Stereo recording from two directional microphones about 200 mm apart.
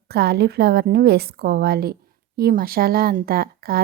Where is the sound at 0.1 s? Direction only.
55° right (ahead or behind).